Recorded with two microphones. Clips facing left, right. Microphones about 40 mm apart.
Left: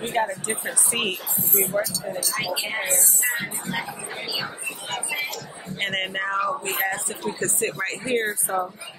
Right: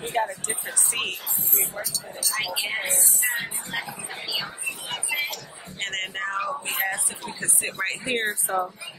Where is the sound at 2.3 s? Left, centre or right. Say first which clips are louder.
Right 2 dB; centre.